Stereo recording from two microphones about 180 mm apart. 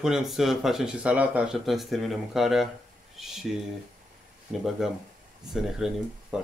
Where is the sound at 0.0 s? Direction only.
Centre (ahead or behind).